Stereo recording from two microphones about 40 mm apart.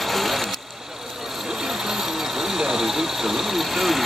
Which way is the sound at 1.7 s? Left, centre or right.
Centre.